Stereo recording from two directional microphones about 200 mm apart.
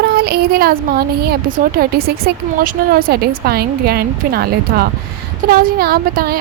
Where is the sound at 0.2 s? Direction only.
50° right (ahead or behind).